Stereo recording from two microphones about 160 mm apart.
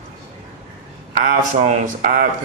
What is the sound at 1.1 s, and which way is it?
A man's voice, 55° right (ahead or behind).